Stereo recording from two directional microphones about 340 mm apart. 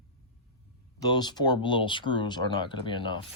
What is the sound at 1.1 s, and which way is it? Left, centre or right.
Speech, centre.